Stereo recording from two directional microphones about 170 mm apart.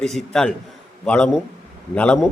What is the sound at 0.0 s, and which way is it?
Speech, centre (ahead or behind).